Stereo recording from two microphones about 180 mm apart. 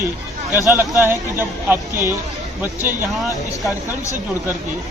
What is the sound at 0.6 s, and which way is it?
Speech, 15° right (ahead or behind).